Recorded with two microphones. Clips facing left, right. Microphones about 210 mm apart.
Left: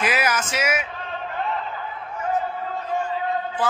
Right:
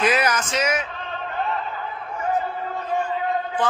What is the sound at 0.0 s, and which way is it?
Speech, 5° left (ahead or behind).